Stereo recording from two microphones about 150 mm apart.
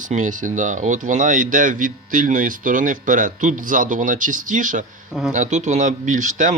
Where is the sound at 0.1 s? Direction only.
60° right (ahead or behind).